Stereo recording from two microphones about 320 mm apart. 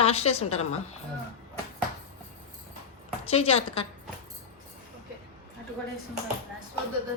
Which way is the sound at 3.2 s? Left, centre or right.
Centre.